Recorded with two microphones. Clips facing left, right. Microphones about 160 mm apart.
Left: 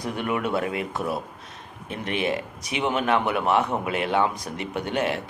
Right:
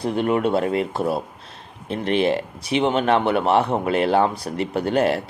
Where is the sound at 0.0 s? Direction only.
30° right (ahead or behind).